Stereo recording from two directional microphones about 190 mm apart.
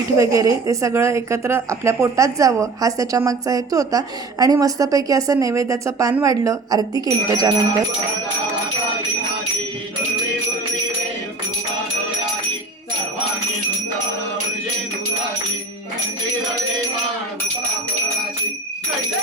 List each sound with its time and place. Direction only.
0.2 s a woman's voice: 15° right (ahead or behind)